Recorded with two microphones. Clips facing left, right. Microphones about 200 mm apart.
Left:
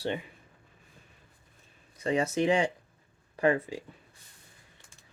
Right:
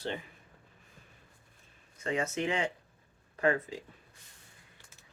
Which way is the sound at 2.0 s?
35° left (ahead or behind).